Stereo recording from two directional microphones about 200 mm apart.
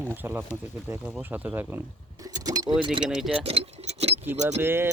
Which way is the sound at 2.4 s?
20° right (ahead or behind).